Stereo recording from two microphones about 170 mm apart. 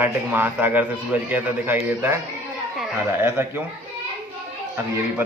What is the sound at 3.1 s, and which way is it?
Speech, 15° right (ahead or behind).